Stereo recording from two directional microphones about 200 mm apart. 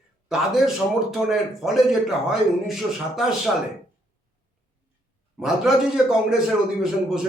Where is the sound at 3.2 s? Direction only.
Centre (ahead or behind).